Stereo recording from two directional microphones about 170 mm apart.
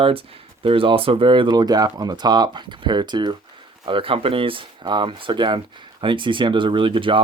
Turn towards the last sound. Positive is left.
turn(degrees=-30)  # may be behind; listen again after turning